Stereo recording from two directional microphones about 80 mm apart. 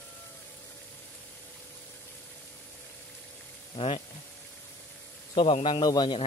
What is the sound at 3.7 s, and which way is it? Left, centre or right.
Speech, left.